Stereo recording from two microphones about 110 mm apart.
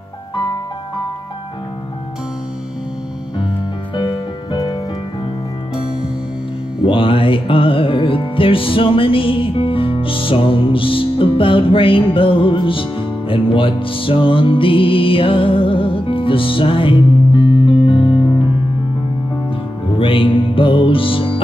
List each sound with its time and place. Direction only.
3.9 s music: 45° left (ahead or behind)
6.8 s music: 50° left (ahead or behind)
19.9 s music: 55° left (ahead or behind)